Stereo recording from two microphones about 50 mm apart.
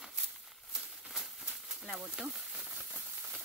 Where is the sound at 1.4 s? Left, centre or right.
Centre.